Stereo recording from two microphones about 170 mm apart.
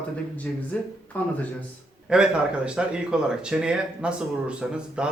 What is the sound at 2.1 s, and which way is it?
Speech, 5° right (ahead or behind).